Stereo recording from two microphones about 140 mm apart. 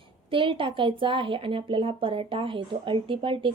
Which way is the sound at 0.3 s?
40° right (ahead or behind).